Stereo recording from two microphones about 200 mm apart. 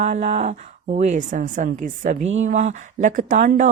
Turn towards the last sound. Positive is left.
turn(degrees=-40)  # may be behind; listen again after turning